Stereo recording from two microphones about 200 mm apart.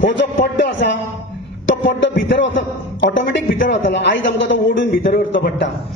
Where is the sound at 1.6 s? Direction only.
65° left (ahead or behind).